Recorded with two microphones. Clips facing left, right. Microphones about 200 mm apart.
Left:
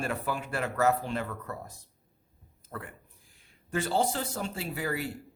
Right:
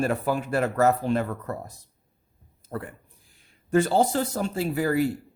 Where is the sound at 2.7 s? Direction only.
40° right (ahead or behind).